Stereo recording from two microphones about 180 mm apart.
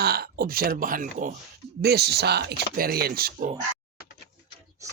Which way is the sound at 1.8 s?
60° right (ahead or behind).